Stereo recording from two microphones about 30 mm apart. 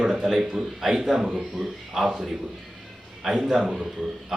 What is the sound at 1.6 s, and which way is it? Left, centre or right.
Speech, centre.